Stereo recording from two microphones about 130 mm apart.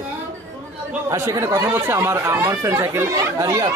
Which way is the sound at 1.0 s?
25° right (ahead or behind).